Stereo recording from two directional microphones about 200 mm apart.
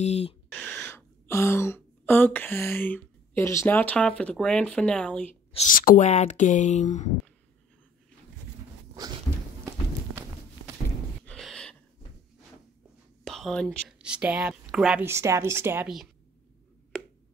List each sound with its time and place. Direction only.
0.0 s speech: 30° left (ahead or behind)
0.5 s speech: 5° left (ahead or behind)
5.5 s speech: 35° left (ahead or behind)
11.2 s a sound: 5° left (ahead or behind)
13.2 s a woman's voice: centre (ahead or behind)